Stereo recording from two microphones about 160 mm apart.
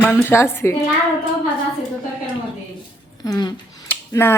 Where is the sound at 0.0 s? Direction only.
10° left (ahead or behind).